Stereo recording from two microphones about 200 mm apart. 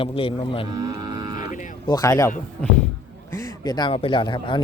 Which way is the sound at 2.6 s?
5° left (ahead or behind).